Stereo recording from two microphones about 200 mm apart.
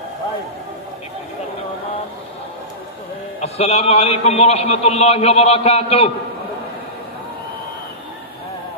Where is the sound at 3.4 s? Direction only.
30° left (ahead or behind).